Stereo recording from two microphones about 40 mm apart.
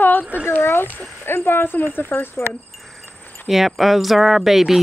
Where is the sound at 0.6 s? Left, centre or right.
Left.